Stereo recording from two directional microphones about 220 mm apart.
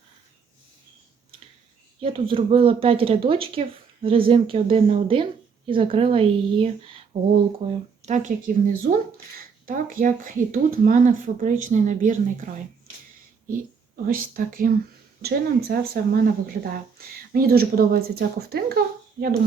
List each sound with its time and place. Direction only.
2.0 s speech: 25° right (ahead or behind)
13.5 s speech: 40° right (ahead or behind)
19.2 s speech: 15° right (ahead or behind)